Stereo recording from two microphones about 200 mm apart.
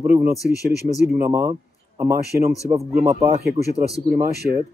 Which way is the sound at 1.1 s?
10° right (ahead or behind).